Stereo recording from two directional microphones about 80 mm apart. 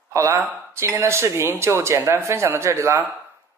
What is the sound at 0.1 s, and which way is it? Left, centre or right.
Speech, right.